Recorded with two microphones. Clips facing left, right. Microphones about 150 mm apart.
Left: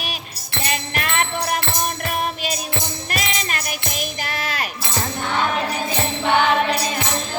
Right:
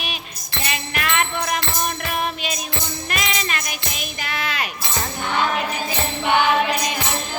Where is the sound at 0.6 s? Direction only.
40° left (ahead or behind).